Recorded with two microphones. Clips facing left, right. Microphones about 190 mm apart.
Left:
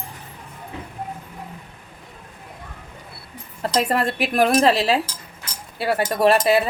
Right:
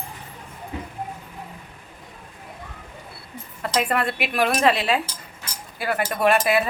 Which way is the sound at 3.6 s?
35° left (ahead or behind).